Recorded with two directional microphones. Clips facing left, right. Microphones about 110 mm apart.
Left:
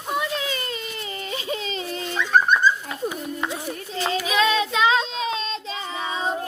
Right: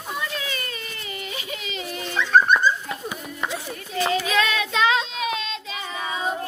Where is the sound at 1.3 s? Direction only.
35° left (ahead or behind).